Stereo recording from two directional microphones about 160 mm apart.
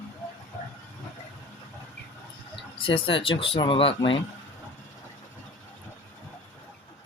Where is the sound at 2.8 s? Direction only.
35° left (ahead or behind).